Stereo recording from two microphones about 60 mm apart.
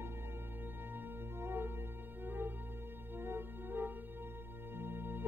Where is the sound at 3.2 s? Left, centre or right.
Right.